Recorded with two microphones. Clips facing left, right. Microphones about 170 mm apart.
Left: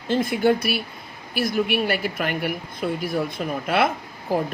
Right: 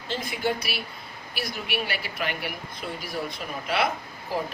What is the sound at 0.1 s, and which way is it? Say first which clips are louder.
Speech: left 9 dB; 50° left (ahead or behind).